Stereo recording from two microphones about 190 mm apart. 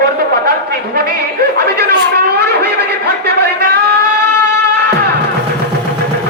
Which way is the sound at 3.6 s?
55° right (ahead or behind).